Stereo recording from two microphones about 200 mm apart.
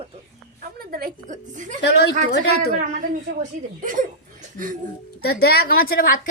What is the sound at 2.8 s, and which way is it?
A woman's voice, 40° right (ahead or behind).